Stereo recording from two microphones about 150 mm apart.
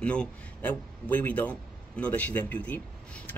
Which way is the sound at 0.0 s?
10° left (ahead or behind).